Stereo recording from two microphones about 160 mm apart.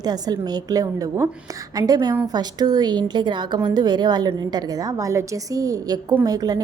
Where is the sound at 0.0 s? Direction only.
25° right (ahead or behind).